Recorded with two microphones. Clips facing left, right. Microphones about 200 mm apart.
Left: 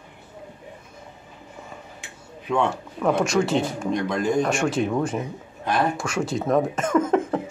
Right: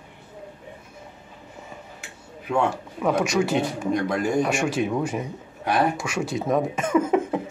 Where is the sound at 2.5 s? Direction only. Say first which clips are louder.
Even; 10° right (ahead or behind).